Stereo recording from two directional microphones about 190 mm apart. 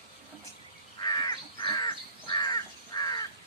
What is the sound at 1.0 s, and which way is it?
Crow, 20° left (ahead or behind).